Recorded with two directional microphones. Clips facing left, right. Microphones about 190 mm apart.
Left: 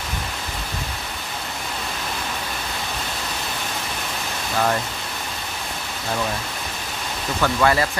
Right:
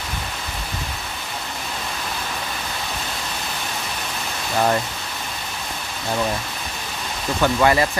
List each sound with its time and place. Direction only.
7.4 s speech: 20° right (ahead or behind)